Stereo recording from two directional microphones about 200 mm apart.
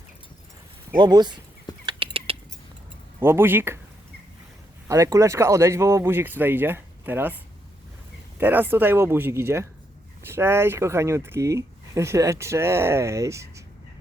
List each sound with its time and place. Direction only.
0.9 s speech: 20° right (ahead or behind)
1.9 s a sound: 25° right (ahead or behind)
3.2 s speech: 10° right (ahead or behind)
4.9 s speech: 15° right (ahead or behind)
8.4 s speech: 10° right (ahead or behind)